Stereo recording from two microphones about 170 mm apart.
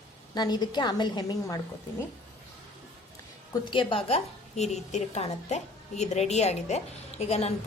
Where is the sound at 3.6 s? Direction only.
30° left (ahead or behind).